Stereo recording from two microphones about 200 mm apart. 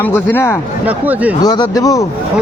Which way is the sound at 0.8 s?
5° right (ahead or behind).